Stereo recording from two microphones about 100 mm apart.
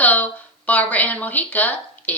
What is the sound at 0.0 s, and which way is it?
Speech, 15° left (ahead or behind).